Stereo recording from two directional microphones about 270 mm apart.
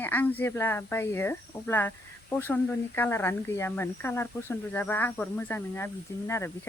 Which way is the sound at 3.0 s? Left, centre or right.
Centre.